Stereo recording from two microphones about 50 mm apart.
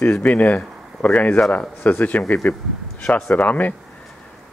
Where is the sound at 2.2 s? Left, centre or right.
Centre.